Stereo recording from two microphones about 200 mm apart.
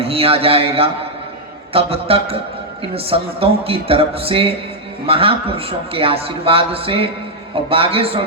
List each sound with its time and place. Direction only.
0.0 s a man's voice: 30° right (ahead or behind)
3.4 s a man's voice: 30° right (ahead or behind)